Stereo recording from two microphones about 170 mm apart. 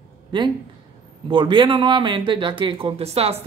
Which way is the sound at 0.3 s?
30° right (ahead or behind).